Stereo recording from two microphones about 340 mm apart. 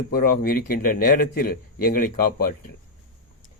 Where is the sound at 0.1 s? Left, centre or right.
Left.